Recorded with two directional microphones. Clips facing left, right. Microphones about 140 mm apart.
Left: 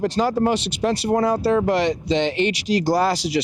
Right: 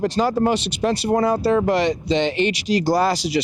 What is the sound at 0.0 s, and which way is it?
Speech, 20° right (ahead or behind).